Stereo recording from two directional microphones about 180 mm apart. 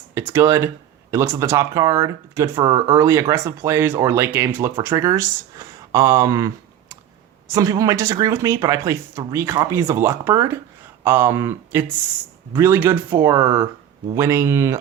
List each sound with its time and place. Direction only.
0.1 s speech: 15° right (ahead or behind)